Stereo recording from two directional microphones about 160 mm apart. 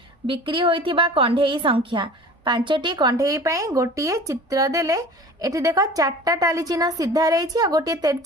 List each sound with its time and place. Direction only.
0.3 s a woman's voice: 30° right (ahead or behind)